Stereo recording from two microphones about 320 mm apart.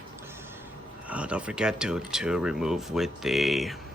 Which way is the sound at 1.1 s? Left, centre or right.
Centre.